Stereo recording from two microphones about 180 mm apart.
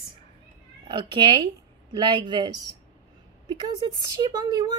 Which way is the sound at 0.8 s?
25° right (ahead or behind).